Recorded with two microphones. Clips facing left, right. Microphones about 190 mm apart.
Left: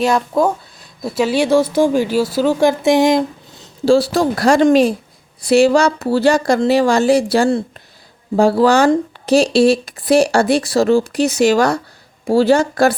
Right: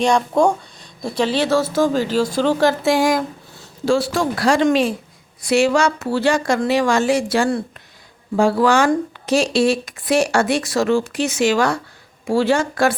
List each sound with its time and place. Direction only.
0.0 s speech: 5° left (ahead or behind); by 3.7 s 20° left (ahead or behind)
3.8 s speech: 35° left (ahead or behind)